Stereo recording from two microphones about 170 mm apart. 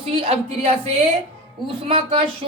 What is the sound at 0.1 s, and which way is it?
Speech, 35° right (ahead or behind).